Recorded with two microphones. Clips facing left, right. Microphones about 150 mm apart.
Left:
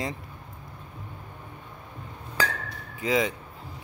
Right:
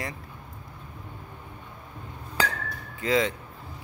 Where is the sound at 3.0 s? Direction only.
15° left (ahead or behind).